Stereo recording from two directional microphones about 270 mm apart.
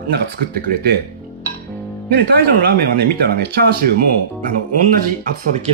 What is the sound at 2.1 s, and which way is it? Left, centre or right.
Speech, right.